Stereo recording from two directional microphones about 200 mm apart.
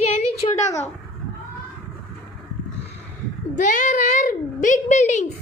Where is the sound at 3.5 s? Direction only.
40° left (ahead or behind).